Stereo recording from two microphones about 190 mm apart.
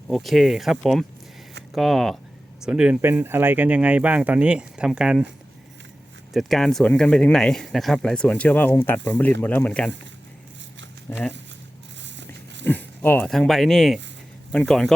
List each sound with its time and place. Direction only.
0.1 s speech: centre (ahead or behind)
6.3 s speech: centre (ahead or behind)
11.1 s speech: 10° left (ahead or behind)
12.0 s a sound: 70° right (ahead or behind)
12.6 s speech: 10° left (ahead or behind)